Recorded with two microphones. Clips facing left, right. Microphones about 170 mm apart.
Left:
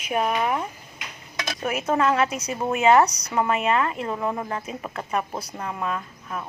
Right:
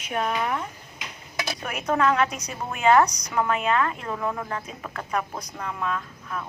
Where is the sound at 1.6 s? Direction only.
5° left (ahead or behind).